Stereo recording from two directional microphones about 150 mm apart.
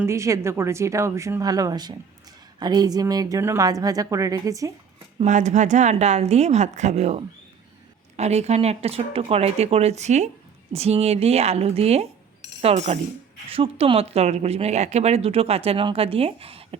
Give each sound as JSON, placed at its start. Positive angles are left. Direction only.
{"t": 0.0, "sound": "speech", "side_deg": -20}
{"t": 5.2, "sound": "speech", "side_deg": -50}